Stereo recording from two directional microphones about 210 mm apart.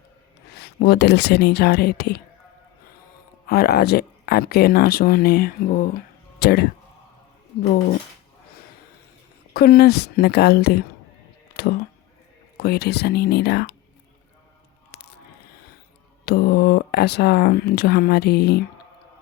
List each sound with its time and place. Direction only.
0.5 s speech: 50° left (ahead or behind)
3.4 s speech: 45° left (ahead or behind)
9.5 s speech: 45° left (ahead or behind)
12.5 s speech: 50° left (ahead or behind)
14.9 s a sound: 35° left (ahead or behind)
16.2 s speech: 50° left (ahead or behind)